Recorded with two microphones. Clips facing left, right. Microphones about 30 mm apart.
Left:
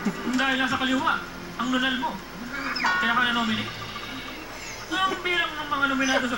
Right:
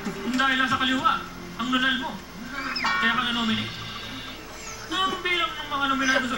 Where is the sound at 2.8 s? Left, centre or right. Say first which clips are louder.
Left 1 dB; centre.